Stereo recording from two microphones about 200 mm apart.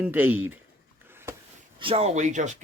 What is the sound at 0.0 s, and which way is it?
Speech, 10° right (ahead or behind).